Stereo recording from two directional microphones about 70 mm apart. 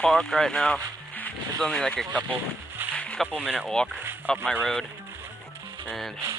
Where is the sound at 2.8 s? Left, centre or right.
Right.